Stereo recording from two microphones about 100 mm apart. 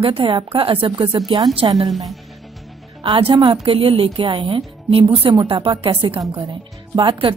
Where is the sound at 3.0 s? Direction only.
55° right (ahead or behind).